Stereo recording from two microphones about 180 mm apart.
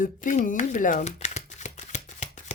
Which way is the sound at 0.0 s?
45° left (ahead or behind).